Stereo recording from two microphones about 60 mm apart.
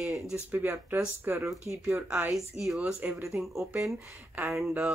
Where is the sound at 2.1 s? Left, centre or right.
Right.